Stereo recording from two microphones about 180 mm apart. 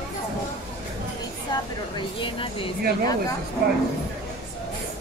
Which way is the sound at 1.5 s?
25° left (ahead or behind).